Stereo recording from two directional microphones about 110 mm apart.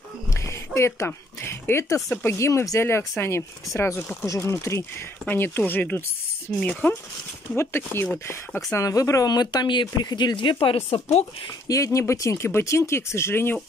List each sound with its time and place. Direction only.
0.7 s speech: 25° left (ahead or behind)
5.2 s speech: 15° left (ahead or behind); by 11.0 s 55° left (ahead or behind)
11.6 s speech: 30° left (ahead or behind)